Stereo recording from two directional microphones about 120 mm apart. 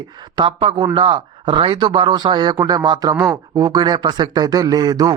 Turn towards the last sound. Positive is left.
turn(degrees=-35)  # may be behind; listen again after turning